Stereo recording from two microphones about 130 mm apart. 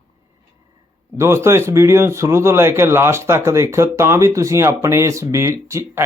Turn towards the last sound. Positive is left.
turn(degrees=-20)  # may be behind; listen again after turning